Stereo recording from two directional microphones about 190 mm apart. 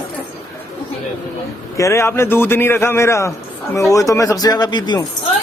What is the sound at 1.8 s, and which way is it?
A man's voice, 15° left (ahead or behind).